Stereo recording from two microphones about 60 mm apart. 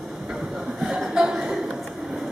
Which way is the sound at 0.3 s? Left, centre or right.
Centre.